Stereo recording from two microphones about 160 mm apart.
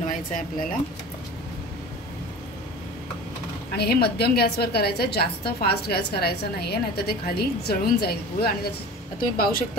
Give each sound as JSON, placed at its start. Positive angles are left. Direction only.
{"t": 0.0, "sound": "speech", "side_deg": 55}
{"t": 3.7, "sound": "a woman's voice", "side_deg": 80}
{"t": 9.2, "sound": "speech", "side_deg": 65}